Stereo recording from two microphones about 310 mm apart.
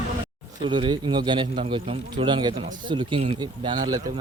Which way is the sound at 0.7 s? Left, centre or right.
Centre.